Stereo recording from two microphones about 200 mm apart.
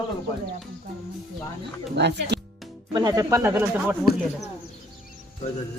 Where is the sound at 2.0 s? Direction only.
60° right (ahead or behind).